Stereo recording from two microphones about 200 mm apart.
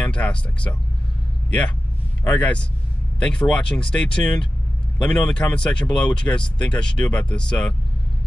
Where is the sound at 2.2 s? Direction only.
5° left (ahead or behind).